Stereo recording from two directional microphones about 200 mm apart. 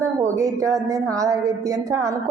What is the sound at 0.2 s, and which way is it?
A woman's voice, 15° right (ahead or behind).